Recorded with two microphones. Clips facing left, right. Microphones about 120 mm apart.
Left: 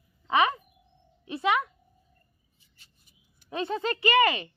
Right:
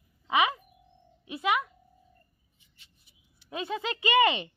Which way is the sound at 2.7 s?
45° left (ahead or behind).